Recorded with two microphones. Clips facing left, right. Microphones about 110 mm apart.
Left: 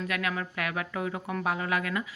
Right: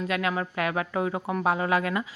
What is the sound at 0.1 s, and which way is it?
Speech, 25° right (ahead or behind).